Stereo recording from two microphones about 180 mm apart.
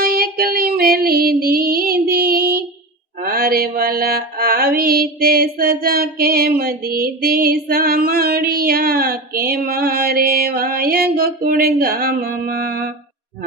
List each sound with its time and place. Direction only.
0.0 s female singing: 55° right (ahead or behind)
3.2 s mantra: 55° right (ahead or behind)